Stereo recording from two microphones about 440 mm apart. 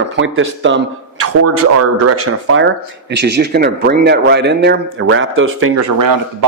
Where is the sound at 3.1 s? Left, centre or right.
Right.